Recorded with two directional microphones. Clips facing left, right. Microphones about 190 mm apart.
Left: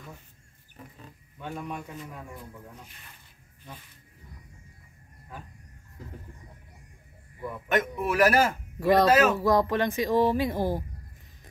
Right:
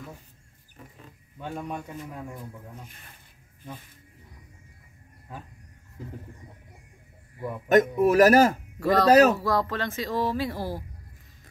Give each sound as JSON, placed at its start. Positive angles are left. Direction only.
{"t": 7.6, "sound": "a man's voice", "side_deg": -40}
{"t": 8.7, "sound": "speech", "side_deg": 15}
{"t": 9.1, "sound": "a man's voice", "side_deg": -40}
{"t": 9.4, "sound": "speech", "side_deg": 20}